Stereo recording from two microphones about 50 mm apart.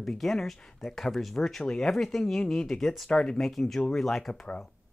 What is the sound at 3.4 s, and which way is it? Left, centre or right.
Speech, centre.